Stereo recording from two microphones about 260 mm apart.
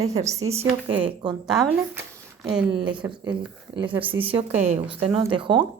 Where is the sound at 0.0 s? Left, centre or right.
Right.